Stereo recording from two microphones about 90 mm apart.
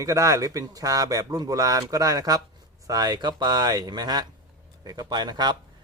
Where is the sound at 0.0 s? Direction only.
40° right (ahead or behind).